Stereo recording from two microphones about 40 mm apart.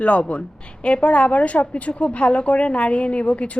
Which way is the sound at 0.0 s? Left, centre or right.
Left.